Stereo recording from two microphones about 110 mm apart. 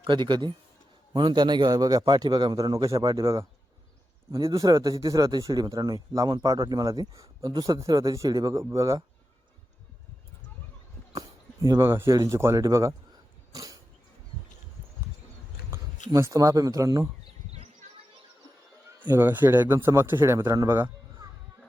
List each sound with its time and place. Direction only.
0.0 s speech: 45° right (ahead or behind); by 9.0 s 30° right (ahead or behind)
11.1 s a sound: 35° right (ahead or behind)
12.1 s a man's voice: 30° right (ahead or behind)
13.5 s dog: 30° right (ahead or behind)
15.7 s speech: 25° right (ahead or behind)
19.0 s a man's voice: 20° right (ahead or behind)